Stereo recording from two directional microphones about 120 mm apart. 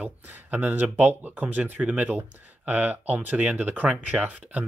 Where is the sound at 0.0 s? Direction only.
15° right (ahead or behind).